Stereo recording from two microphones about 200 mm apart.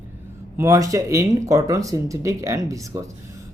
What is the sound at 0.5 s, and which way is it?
Speech, 15° right (ahead or behind).